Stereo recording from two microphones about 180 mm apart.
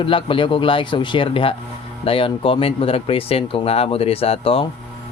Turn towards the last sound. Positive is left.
turn(degrees=30)  # may be behind; listen again after turning